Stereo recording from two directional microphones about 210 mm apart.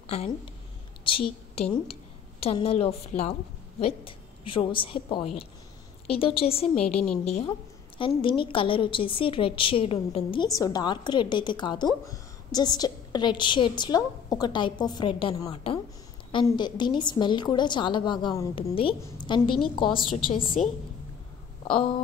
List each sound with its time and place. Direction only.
1.1 s a woman's voice: 25° left (ahead or behind)
6.7 s a woman's voice: 5° left (ahead or behind)
7.2 s a woman's voice: 30° left (ahead or behind)